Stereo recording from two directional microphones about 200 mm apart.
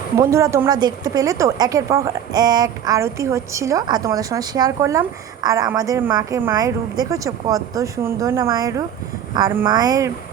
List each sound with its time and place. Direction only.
0.2 s a woman's voice: 15° right (ahead or behind)